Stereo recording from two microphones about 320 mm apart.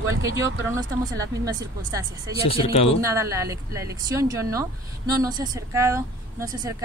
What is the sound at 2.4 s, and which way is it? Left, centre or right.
Speech, centre.